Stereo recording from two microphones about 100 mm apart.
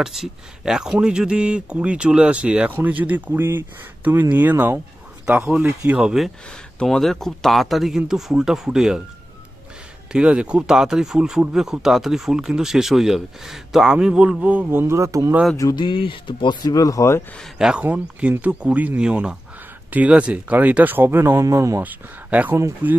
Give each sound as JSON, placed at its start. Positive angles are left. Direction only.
{"t": 0.0, "sound": "speech", "side_deg": -5}
{"t": 6.8, "sound": "speech", "side_deg": 5}
{"t": 10.1, "sound": "speech", "side_deg": -10}
{"t": 15.7, "sound": "speech", "side_deg": 55}
{"t": 16.7, "sound": "speech", "side_deg": 35}
{"t": 17.6, "sound": "speech", "side_deg": -5}
{"t": 21.8, "sound": "speech", "side_deg": -15}